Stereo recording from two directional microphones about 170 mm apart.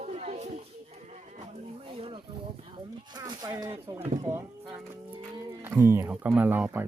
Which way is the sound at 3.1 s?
25° right (ahead or behind).